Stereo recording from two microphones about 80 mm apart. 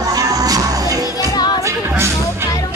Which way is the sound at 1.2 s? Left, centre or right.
Left.